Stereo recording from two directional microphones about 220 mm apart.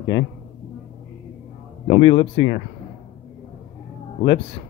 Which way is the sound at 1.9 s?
25° left (ahead or behind).